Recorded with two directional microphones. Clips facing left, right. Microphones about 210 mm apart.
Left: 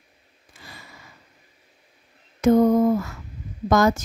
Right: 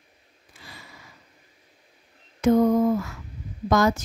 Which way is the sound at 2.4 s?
45° left (ahead or behind).